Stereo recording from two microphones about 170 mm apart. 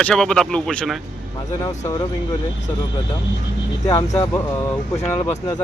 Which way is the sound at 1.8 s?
20° left (ahead or behind).